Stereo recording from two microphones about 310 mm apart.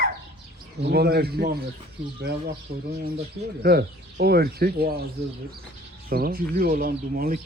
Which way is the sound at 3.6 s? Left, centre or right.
Right.